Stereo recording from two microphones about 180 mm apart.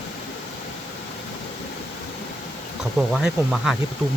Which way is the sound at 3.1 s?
Centre (ahead or behind).